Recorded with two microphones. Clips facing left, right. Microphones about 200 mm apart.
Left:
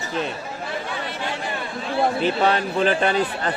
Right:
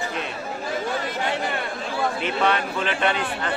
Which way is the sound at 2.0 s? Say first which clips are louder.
Left 4 dB; 35° left (ahead or behind).